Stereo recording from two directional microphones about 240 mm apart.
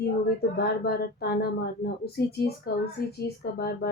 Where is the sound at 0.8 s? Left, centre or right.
Left.